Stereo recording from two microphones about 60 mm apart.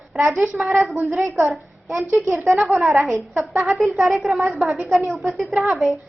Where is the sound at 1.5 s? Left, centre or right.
Centre.